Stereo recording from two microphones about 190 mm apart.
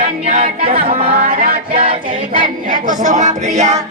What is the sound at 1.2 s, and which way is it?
Music, 45° right (ahead or behind).